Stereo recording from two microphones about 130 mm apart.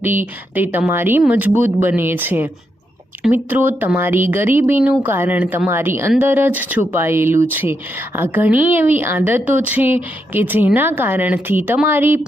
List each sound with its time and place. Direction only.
0.0 s a woman's voice: 15° right (ahead or behind)